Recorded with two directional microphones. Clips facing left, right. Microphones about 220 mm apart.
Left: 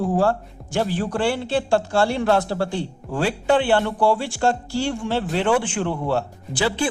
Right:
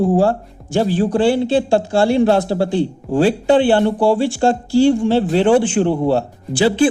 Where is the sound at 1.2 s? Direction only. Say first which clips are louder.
Right 6 dB; 35° right (ahead or behind).